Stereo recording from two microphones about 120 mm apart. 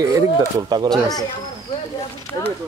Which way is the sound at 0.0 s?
30° right (ahead or behind).